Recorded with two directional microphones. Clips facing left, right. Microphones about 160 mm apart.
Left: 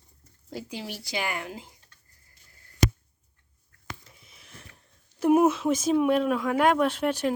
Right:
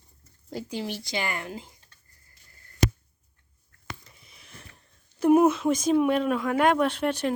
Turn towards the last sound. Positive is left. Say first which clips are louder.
# even
turn(degrees=5)  # may be behind; listen again after turning